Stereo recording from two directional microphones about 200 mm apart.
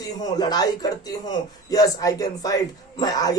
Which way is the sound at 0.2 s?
20° left (ahead or behind).